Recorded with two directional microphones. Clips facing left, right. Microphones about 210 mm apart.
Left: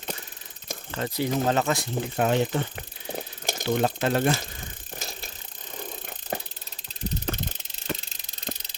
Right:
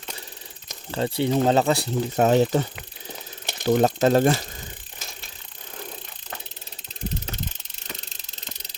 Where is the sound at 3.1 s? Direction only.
45° left (ahead or behind).